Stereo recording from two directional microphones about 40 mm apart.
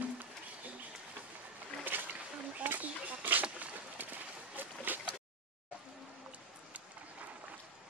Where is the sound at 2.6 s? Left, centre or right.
Right.